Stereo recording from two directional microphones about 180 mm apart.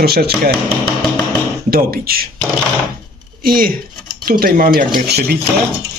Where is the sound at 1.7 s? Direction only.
55° right (ahead or behind).